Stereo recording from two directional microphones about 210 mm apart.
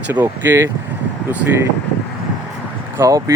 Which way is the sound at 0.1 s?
10° right (ahead or behind).